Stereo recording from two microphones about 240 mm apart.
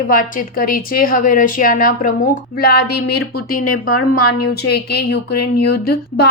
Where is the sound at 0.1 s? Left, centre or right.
Left.